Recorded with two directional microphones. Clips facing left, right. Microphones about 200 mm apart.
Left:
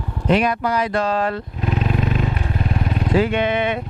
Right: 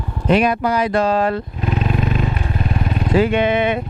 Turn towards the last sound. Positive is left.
turn(degrees=-10)  # may be behind; listen again after turning